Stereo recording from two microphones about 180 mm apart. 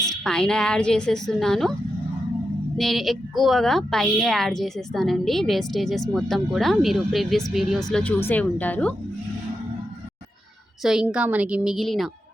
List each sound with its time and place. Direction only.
0.3 s a woman's voice: 5° left (ahead or behind)
2.7 s a woman's voice: centre (ahead or behind)
10.8 s a woman's voice: 5° right (ahead or behind)